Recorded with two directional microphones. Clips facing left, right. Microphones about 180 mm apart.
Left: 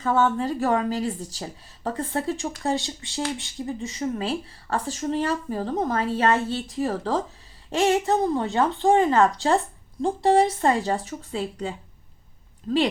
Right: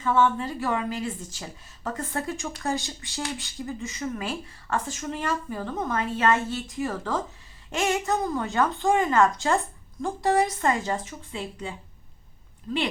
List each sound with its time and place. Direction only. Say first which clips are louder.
0.0 s speech: left 1 dB; 40° left (ahead or behind)